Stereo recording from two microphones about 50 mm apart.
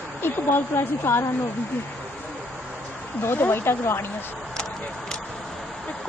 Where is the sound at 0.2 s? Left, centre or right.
Left.